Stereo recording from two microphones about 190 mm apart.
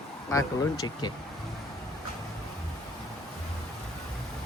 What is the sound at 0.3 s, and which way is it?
Speech, 15° left (ahead or behind).